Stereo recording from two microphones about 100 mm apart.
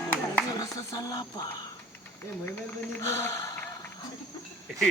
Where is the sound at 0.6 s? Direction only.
40° left (ahead or behind).